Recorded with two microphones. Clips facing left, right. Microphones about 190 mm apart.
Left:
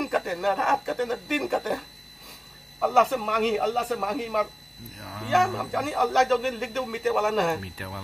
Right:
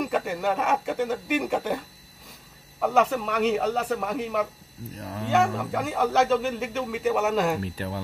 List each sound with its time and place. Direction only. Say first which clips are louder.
0.0 s a man's voice: even; 5° right (ahead or behind)
2.8 s a man's voice: even; 5° right (ahead or behind)
5.0 s speech: right 5 dB; 35° right (ahead or behind)
5.3 s a man's voice: right 1 dB; centre (ahead or behind)
7.6 s speech: right 6 dB; 30° right (ahead or behind)